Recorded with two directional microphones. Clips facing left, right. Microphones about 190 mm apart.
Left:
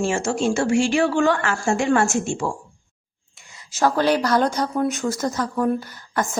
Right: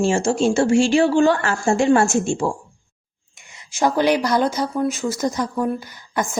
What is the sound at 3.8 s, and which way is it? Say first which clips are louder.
Speech: right 1 dB; 15° right (ahead or behind).